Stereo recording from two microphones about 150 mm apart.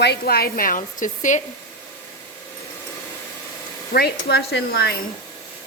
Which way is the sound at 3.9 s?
90° left.